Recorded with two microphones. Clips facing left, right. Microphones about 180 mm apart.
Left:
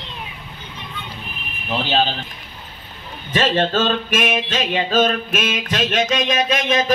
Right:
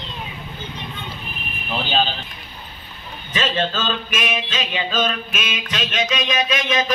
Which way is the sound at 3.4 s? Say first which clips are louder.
Left 5 dB; 55° left (ahead or behind).